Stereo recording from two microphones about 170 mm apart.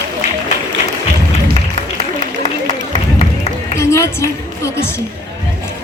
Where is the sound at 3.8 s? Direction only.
15° left (ahead or behind).